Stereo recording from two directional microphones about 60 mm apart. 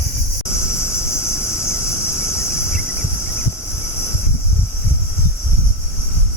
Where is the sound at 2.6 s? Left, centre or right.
Centre.